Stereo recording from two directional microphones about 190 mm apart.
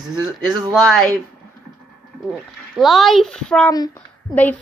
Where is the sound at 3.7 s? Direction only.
20° left (ahead or behind).